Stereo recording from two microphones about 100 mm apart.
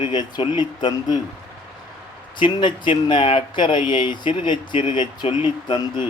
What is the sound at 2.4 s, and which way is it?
Speech, 50° left (ahead or behind).